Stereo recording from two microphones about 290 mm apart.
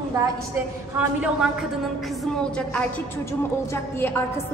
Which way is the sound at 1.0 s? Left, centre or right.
Centre.